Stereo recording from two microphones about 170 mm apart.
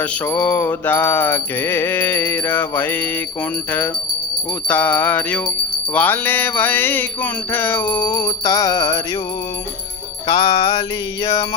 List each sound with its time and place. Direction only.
0.0 s music: 10° left (ahead or behind)
4.7 s music: 10° left (ahead or behind)
10.2 s music: 20° left (ahead or behind)